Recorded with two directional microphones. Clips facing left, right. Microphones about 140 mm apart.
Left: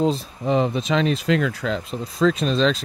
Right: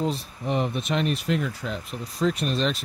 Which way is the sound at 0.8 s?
90° left.